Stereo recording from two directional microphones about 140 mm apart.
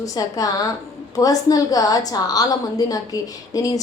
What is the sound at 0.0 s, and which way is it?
A woman's voice, 25° left (ahead or behind).